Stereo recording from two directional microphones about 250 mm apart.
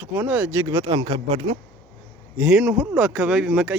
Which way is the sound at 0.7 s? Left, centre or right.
Centre.